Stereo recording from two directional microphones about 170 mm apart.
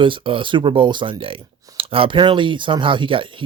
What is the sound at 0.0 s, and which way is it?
Speech, 30° right (ahead or behind).